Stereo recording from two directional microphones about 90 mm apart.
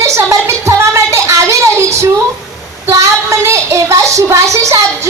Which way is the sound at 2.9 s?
35° right (ahead or behind).